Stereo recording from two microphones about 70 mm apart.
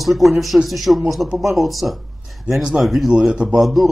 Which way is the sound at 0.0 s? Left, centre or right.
Centre.